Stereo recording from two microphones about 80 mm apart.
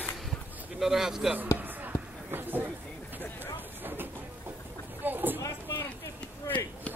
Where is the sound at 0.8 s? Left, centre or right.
Centre.